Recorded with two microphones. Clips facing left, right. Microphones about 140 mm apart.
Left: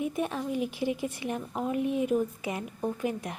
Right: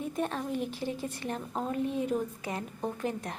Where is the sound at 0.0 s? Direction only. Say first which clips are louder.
Left 2 dB; 10° left (ahead or behind).